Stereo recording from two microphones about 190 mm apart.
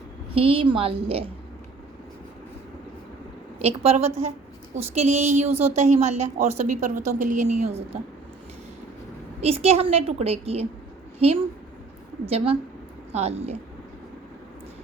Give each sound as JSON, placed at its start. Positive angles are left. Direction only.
{"t": 0.3, "sound": "a woman's voice", "side_deg": -30}
{"t": 3.6, "sound": "a woman's voice", "side_deg": -35}
{"t": 9.4, "sound": "a woman's voice", "side_deg": -35}